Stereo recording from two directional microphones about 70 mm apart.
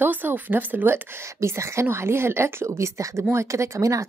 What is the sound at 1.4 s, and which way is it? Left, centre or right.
A woman's voice, right.